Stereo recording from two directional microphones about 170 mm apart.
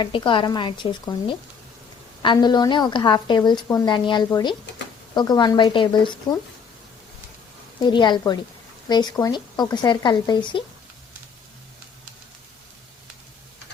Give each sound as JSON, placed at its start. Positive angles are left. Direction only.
{"t": 0.0, "sound": "a woman's voice", "side_deg": 30}
{"t": 7.8, "sound": "a woman's voice", "side_deg": 25}